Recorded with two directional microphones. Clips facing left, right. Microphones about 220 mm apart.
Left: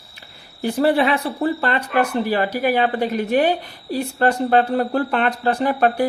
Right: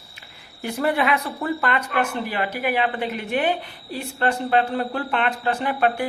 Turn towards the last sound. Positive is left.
turn(degrees=40)  # may be behind; listen again after turning